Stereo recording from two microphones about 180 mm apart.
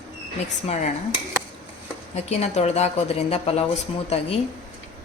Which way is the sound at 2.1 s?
35° left (ahead or behind).